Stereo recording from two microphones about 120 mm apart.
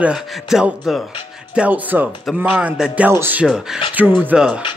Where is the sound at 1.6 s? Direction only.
15° right (ahead or behind).